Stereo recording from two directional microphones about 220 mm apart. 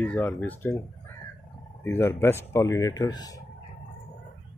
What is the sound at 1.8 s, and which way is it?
Speech, 10° left (ahead or behind).